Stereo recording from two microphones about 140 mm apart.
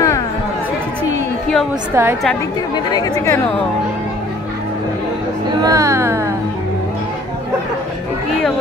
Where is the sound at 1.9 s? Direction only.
15° right (ahead or behind).